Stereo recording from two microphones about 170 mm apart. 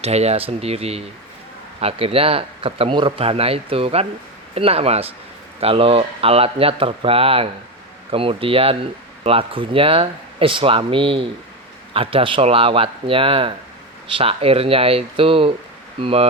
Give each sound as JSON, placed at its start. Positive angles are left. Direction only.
{"t": 0.0, "sound": "speech", "side_deg": -40}